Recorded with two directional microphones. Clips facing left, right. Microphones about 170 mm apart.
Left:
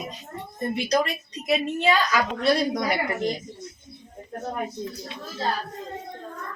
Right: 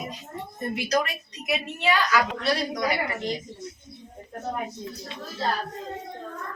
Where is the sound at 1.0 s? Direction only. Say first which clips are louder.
Left 4 dB; 30° left (ahead or behind).